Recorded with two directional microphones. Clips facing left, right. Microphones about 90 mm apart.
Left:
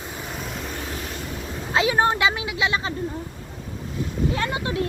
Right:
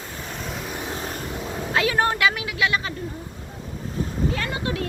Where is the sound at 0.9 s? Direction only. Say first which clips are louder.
Right 2 dB; 35° right (ahead or behind).